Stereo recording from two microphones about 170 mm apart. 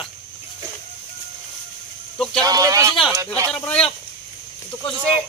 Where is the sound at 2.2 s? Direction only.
5° left (ahead or behind).